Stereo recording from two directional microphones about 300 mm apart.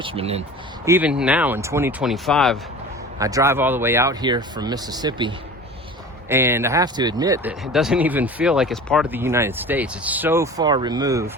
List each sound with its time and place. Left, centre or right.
0.0 s speech: centre
0.9 s speech: centre
3.2 s speech: centre